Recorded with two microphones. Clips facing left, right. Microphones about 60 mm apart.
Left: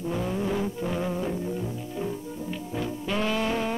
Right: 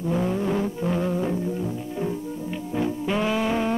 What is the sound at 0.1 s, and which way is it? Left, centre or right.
Music, centre.